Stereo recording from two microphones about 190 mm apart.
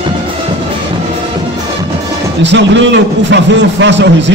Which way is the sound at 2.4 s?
70° right (ahead or behind).